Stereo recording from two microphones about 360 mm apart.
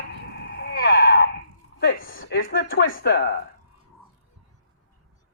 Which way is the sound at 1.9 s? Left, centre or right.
Left.